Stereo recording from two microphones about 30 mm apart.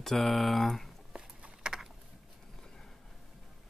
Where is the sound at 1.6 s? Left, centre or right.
Right.